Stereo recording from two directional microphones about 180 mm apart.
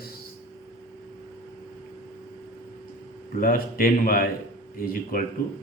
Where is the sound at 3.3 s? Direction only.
55° left (ahead or behind).